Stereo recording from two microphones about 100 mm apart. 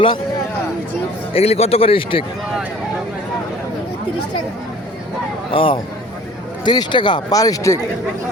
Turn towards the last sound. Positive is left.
turn(degrees=35)  # may be behind; listen again after turning